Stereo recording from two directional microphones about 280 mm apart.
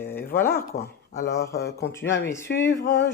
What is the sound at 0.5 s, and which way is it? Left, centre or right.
Speech, left.